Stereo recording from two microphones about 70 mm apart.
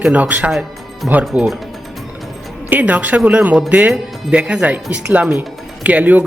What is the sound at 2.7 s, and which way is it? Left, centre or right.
Speech, right.